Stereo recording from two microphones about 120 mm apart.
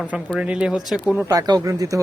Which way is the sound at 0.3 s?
10° right (ahead or behind).